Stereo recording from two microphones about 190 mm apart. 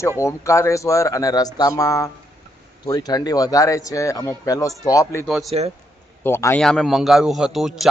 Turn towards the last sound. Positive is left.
turn(degrees=0)  # may be behind; listen again after turning